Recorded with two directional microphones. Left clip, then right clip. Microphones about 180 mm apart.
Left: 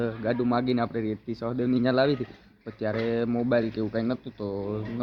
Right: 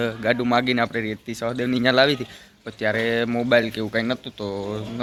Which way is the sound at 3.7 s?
25° right (ahead or behind).